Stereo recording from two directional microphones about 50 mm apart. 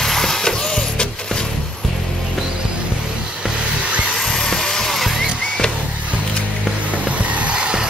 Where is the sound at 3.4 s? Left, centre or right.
Right.